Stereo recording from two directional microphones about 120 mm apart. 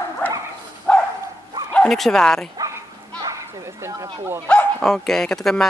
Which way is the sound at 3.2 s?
25° right (ahead or behind).